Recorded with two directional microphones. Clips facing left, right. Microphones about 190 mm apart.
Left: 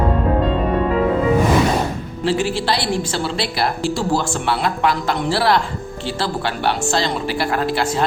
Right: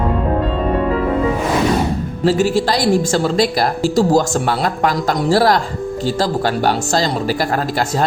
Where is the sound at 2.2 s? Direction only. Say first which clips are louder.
Right 4 dB; 40° right (ahead or behind).